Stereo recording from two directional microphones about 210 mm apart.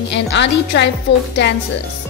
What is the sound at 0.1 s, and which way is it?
A woman's voice, 55° left (ahead or behind).